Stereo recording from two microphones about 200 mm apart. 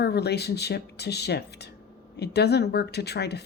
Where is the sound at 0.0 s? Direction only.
55° left (ahead or behind).